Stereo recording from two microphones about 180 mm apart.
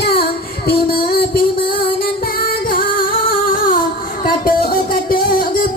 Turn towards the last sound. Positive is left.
turn(degrees=50)  # may be behind; listen again after turning